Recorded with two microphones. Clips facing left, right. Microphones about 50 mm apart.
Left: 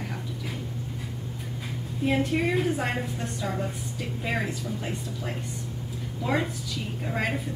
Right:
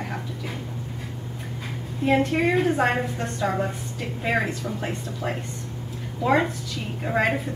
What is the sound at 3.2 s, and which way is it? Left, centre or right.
Speech, right.